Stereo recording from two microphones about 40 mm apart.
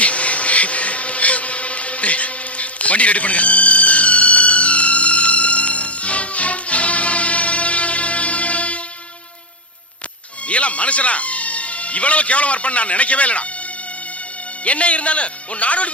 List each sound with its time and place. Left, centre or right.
0.0 s a sound: left
10.4 s speech: left
14.6 s a man's voice: left